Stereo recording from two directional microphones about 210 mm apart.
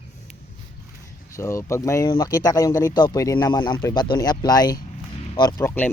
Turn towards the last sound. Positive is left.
turn(degrees=10)  # may be behind; listen again after turning